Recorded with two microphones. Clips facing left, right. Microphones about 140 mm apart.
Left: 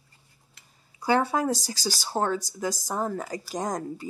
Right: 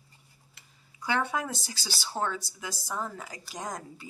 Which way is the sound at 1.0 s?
35° left (ahead or behind).